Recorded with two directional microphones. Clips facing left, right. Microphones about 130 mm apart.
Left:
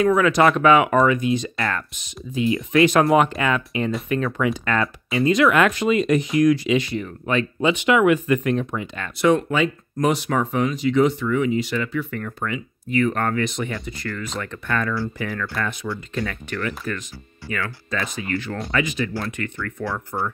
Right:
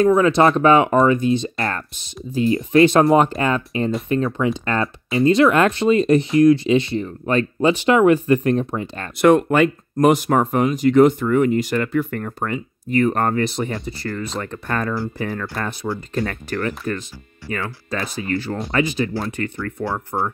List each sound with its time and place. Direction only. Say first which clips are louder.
0.0 s speech: right 2 dB; 30° right (ahead or behind)
9.2 s speech: right 5 dB; 55° right (ahead or behind); by 20.2 s 35° right (ahead or behind)